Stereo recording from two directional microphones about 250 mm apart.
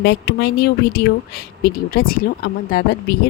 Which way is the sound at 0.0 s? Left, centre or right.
Left.